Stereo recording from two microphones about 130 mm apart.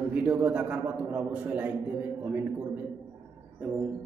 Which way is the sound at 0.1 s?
10° right (ahead or behind).